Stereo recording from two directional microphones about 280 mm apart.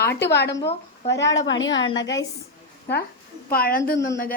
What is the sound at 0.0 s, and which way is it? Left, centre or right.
A woman's voice, left.